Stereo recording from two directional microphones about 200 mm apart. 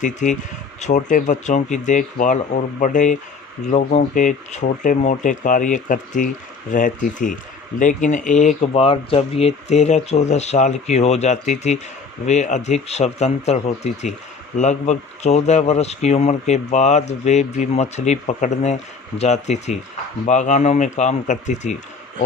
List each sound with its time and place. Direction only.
0.0 s speech: 40° left (ahead or behind)